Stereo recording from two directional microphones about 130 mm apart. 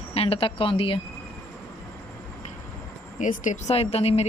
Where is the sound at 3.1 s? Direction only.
75° left (ahead or behind); by 4.2 s 50° left (ahead or behind).